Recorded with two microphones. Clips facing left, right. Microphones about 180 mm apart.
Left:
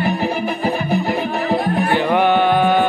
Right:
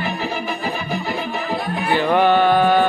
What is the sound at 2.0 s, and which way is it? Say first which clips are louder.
Music: right 2 dB; 15° left (ahead or behind).